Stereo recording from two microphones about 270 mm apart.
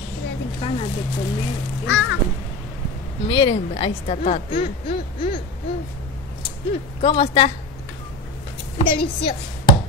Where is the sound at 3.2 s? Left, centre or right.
Centre.